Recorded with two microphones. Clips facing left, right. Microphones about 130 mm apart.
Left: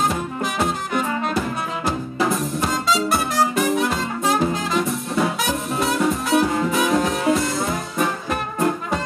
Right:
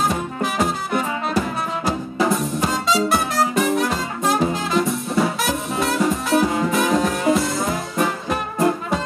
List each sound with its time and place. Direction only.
0.1 s music: centre (ahead or behind)